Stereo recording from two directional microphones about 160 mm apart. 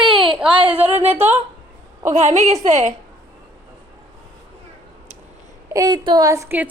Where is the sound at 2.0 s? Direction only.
45° right (ahead or behind).